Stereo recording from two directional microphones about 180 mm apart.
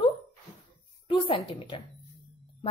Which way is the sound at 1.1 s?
25° left (ahead or behind).